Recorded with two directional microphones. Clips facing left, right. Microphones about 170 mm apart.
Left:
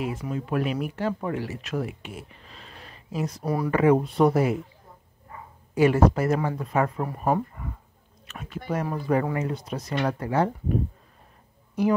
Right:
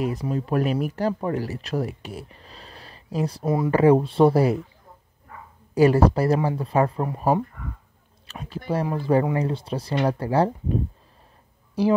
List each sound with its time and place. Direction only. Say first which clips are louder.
0.0 s speech: right 4 dB; 35° right (ahead or behind)
5.8 s speech: right 2 dB; 35° right (ahead or behind)